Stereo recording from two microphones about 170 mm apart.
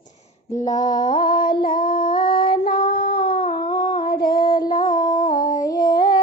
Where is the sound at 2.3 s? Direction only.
60° left (ahead or behind).